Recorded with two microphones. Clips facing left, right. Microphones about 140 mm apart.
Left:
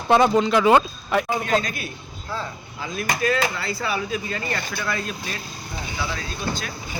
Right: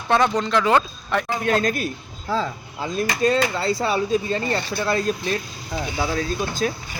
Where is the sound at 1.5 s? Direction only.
45° right (ahead or behind).